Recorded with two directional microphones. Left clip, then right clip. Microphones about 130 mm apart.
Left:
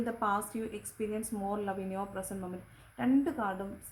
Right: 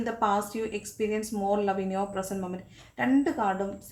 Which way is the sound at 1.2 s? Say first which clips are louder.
Right 11 dB; 20° left (ahead or behind).